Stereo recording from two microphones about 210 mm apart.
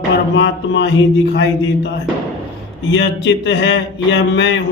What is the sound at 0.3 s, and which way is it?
Speech, 60° left (ahead or behind).